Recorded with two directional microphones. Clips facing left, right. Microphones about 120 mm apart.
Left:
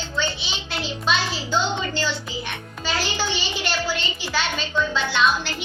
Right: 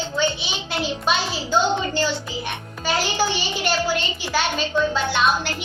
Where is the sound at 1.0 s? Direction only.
45° right (ahead or behind).